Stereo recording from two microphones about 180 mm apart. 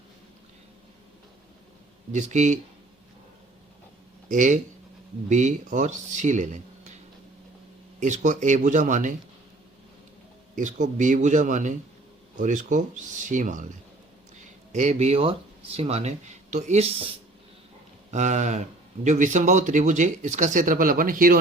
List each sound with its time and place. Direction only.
2.1 s speech: 40° right (ahead or behind)
4.3 s speech: 45° right (ahead or behind)
7.9 s speech: 45° right (ahead or behind)
10.5 s speech: 45° right (ahead or behind)